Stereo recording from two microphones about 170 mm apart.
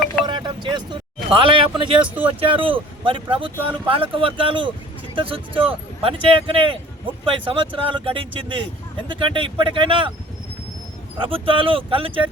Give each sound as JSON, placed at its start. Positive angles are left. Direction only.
{"t": 0.3, "sound": "a sound", "side_deg": -25}
{"t": 1.3, "sound": "speech", "side_deg": -30}
{"t": 11.2, "sound": "speech", "side_deg": -30}